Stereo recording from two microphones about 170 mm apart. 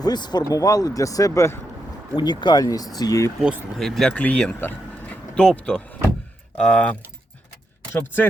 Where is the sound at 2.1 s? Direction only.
25° left (ahead or behind).